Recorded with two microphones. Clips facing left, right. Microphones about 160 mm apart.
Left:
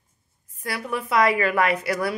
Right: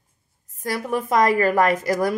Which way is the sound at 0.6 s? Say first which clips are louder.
Right 4 dB; 40° right (ahead or behind).